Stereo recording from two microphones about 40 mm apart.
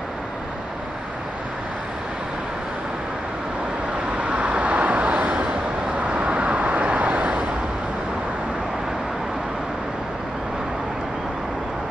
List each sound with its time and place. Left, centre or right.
4.2 s vehicle: right
5.3 s vehicle: right